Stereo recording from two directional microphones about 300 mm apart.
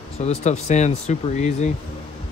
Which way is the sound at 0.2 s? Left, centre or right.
Left.